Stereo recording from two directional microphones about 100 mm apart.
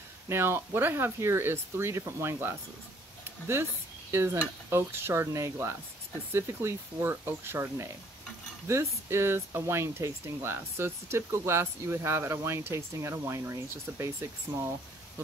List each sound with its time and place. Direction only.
0.3 s speech: 25° right (ahead or behind)